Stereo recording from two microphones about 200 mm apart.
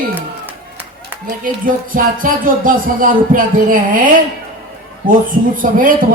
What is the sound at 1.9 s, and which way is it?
Speech, 45° right (ahead or behind).